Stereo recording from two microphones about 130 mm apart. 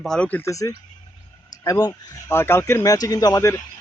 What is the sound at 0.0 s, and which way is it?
Speech, 5° left (ahead or behind).